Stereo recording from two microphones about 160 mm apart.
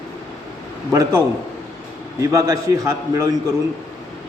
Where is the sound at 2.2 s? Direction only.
20° right (ahead or behind).